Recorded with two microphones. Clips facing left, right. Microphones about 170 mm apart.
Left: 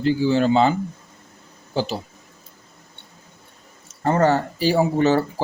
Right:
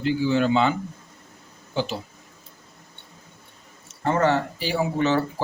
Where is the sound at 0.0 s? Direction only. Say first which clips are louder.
Left 3 dB; 35° left (ahead or behind).